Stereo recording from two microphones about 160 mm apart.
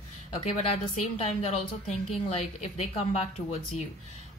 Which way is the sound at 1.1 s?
40° left (ahead or behind).